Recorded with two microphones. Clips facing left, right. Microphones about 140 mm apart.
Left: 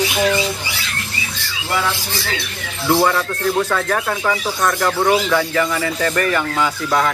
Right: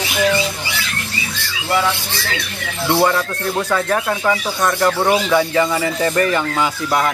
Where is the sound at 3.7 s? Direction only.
5° right (ahead or behind); by 6.7 s 25° right (ahead or behind).